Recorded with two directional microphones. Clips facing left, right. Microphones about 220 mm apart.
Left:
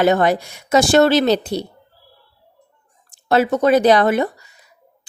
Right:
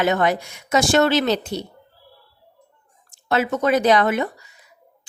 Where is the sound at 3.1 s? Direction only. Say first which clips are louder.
Left 5 dB; 35° left (ahead or behind).